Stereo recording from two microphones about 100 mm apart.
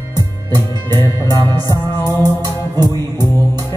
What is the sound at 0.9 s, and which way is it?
Music, 25° left (ahead or behind).